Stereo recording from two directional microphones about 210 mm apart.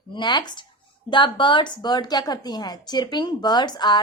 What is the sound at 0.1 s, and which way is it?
A woman's voice, 20° left (ahead or behind).